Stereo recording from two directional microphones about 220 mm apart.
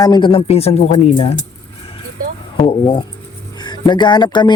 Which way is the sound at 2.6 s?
20° left (ahead or behind).